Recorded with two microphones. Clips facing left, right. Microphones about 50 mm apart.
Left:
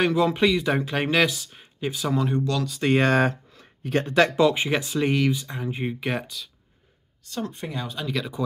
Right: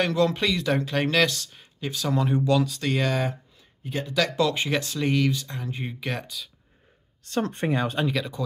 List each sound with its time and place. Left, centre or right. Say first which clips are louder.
0.0 s speech: left 2 dB; centre
2.1 s speech: right 4 dB; centre
2.8 s speech: left 5 dB; left
3.5 s a sound: left 7 dB; left
4.0 s speech: left 5 dB; left
4.4 s speech: left 3 dB; centre
6.2 s speech: even; centre
7.4 s speech: right 7 dB; right
8.4 s speech: left 7 dB; centre